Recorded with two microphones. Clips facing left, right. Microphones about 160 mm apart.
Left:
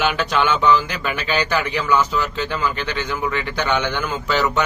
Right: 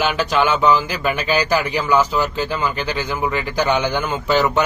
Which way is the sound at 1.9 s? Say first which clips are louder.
Right 2 dB; 30° right (ahead or behind).